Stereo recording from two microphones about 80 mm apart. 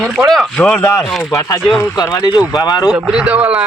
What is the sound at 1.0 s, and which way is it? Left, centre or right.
Speech, centre.